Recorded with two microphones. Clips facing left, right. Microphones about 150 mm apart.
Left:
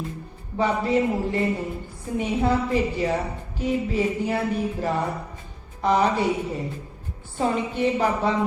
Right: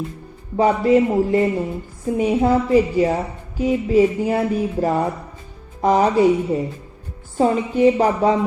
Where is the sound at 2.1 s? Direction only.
40° right (ahead or behind).